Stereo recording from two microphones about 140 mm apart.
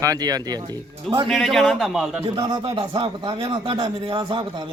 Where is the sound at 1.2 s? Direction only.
Centre (ahead or behind).